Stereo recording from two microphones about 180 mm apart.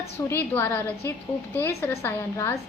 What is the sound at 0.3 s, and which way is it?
A woman's voice, 15° left (ahead or behind).